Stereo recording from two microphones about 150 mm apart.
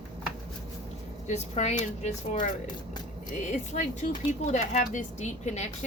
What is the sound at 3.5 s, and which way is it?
Speech, 55° left (ahead or behind).